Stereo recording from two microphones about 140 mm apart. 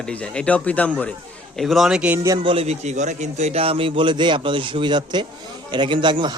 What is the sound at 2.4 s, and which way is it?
A man's voice, 40° right (ahead or behind).